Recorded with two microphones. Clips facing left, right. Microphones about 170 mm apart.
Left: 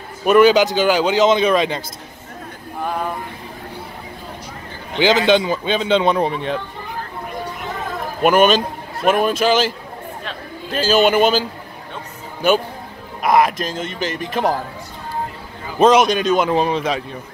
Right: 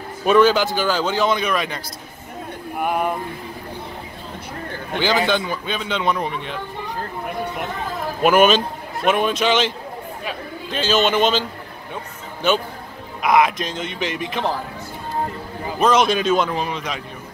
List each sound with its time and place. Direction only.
0.2 s a man's voice: 10° left (ahead or behind); by 1.8 s 25° left (ahead or behind)
2.8 s speech: 15° right (ahead or behind)
4.9 s a man's voice: 20° left (ahead or behind)
8.2 s a man's voice: centre (ahead or behind)
10.9 s a man's voice: 10° left (ahead or behind)
13.2 s speech: centre (ahead or behind)
16.1 s speech: centre (ahead or behind)
16.5 s a man's voice: 35° left (ahead or behind)